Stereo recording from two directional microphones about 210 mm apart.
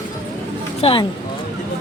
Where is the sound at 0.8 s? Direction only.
25° left (ahead or behind).